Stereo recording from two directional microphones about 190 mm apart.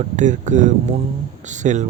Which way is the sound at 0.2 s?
40° right (ahead or behind).